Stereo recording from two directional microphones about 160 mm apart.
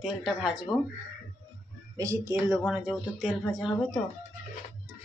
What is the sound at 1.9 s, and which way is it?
Speech, 15° right (ahead or behind).